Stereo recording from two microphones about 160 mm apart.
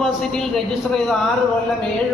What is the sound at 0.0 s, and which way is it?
A man's voice, centre (ahead or behind).